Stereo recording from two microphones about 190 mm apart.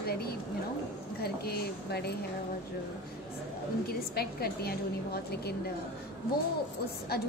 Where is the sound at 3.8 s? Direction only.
55° left (ahead or behind).